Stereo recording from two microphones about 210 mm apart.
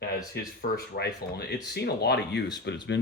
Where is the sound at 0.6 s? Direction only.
45° left (ahead or behind).